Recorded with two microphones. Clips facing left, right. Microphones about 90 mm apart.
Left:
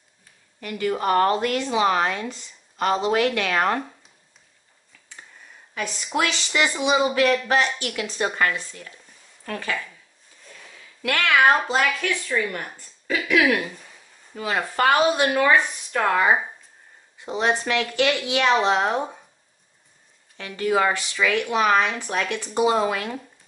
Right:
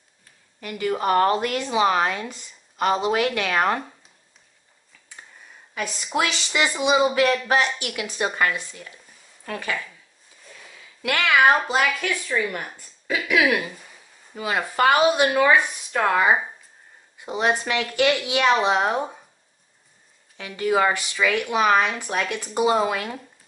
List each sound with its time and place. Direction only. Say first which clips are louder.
0.6 s speech: even; 10° right (ahead or behind)
5.8 s speech: even; 5° right (ahead or behind)
20.3 s speech: even; 10° right (ahead or behind)